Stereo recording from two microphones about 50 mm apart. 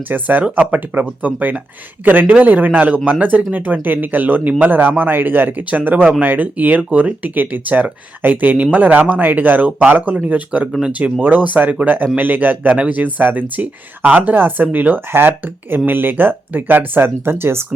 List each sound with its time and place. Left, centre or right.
0.1 s speech: right
11.2 s speech: right